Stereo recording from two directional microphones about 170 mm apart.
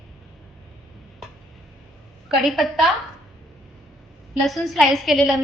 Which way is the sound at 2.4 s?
Centre (ahead or behind).